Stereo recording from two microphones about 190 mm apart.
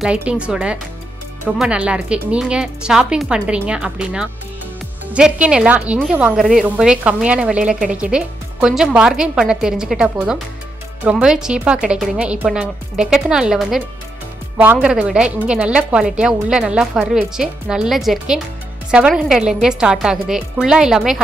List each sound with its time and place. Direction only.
0.0 s speech: 5° right (ahead or behind)